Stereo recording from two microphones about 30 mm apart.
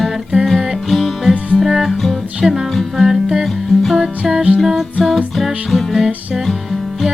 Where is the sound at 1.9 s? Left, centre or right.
Centre.